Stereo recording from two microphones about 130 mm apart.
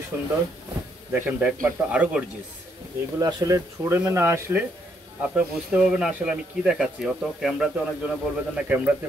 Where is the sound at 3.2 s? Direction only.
30° right (ahead or behind); by 8.9 s 10° right (ahead or behind).